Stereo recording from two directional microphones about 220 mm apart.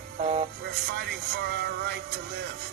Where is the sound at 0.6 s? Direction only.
50° right (ahead or behind).